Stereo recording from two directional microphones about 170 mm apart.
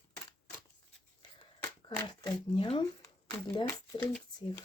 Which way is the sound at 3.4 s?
30° left (ahead or behind).